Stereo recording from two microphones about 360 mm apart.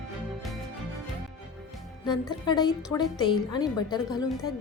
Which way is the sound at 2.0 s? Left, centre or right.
Centre.